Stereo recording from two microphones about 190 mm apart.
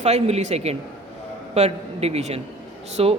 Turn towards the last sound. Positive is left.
turn(degrees=-30)  # may be behind; listen again after turning